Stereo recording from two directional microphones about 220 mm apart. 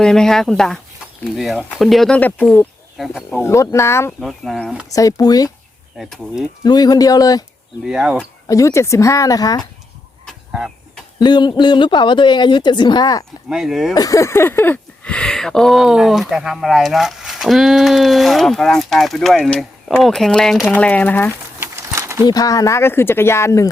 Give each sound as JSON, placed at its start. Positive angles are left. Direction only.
{"t": 0.0, "sound": "speech", "side_deg": 5}
{"t": 4.2, "sound": "speech", "side_deg": 0}
{"t": 4.9, "sound": "speech", "side_deg": 15}
{"t": 6.0, "sound": "speech", "side_deg": 0}
{"t": 6.6, "sound": "speech", "side_deg": 20}
{"t": 7.9, "sound": "speech", "side_deg": -5}
{"t": 8.4, "sound": "speech", "side_deg": 15}
{"t": 10.2, "sound": "chicken", "side_deg": 0}
{"t": 11.2, "sound": "a woman's voice", "side_deg": 20}
{"t": 13.5, "sound": "speech", "side_deg": 0}
{"t": 13.9, "sound": "speech", "side_deg": 15}
{"t": 21.6, "sound": "a sound", "side_deg": -15}
{"t": 22.3, "sound": "speech", "side_deg": 15}